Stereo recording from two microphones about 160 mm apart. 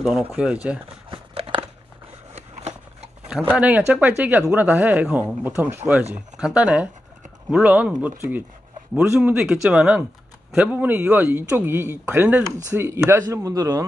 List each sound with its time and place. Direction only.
0.0 s a man's voice: centre (ahead or behind)
1.1 s scissors: 35° right (ahead or behind)
2.3 s a sound: 40° right (ahead or behind)
3.3 s a man's voice: 5° right (ahead or behind)